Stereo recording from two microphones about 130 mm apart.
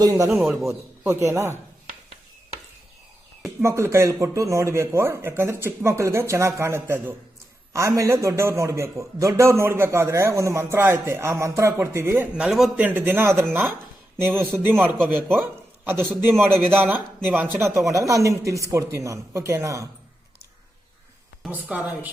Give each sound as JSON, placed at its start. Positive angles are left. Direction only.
{"t": 0.0, "sound": "a man's voice", "side_deg": -25}
{"t": 3.6, "sound": "a man's voice", "side_deg": -20}
{"t": 12.3, "sound": "a man's voice", "side_deg": -5}
{"t": 17.8, "sound": "a man's voice", "side_deg": -25}
{"t": 21.5, "sound": "a man's voice", "side_deg": -10}